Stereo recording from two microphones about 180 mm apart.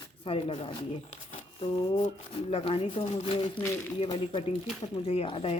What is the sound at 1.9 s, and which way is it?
Speech, 40° left (ahead or behind).